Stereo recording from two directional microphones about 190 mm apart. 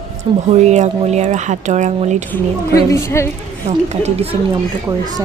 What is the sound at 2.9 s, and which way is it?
Speech, 15° left (ahead or behind).